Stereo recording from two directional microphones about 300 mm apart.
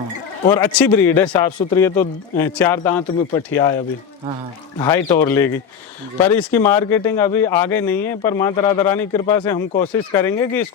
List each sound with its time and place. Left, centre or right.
0.5 s a man's voice: centre
0.9 s speech: centre
4.8 s speech: centre